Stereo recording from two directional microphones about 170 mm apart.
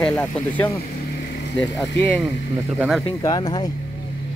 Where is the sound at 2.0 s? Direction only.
5° left (ahead or behind).